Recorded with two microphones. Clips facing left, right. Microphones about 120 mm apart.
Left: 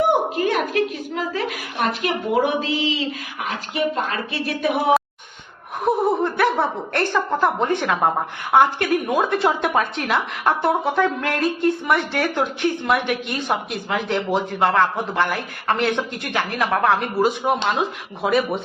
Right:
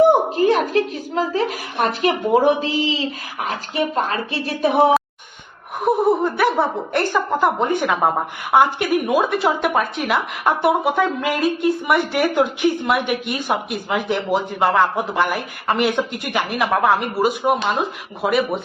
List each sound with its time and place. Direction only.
0.4 s a sound: 35° right (ahead or behind)
4.1 s a woman's voice: 30° right (ahead or behind)
5.8 s a woman's voice: 5° right (ahead or behind)